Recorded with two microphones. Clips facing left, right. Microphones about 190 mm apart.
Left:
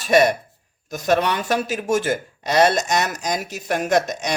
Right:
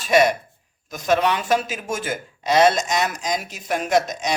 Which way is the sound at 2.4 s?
60° left (ahead or behind).